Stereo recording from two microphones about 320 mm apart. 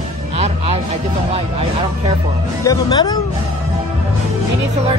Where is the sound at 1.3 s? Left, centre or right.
Centre.